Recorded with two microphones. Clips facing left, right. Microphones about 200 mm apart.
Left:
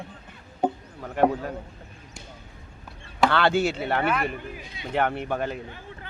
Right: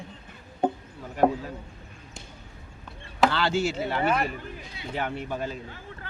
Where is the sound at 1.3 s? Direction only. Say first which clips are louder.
Left 3 dB; 60° left (ahead or behind).